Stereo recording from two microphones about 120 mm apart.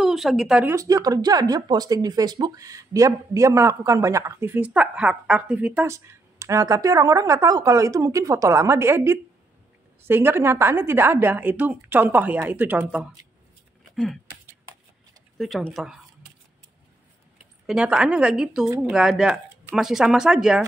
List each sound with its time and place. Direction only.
0.0 s speech: centre (ahead or behind)
0.7 s speech: 30° right (ahead or behind); by 5.9 s 10° right (ahead or behind)
5.9 s a woman's voice: 25° right (ahead or behind)
13.9 s speech: 5° left (ahead or behind)
15.3 s speech: centre (ahead or behind)
17.6 s a woman's voice: 5° right (ahead or behind)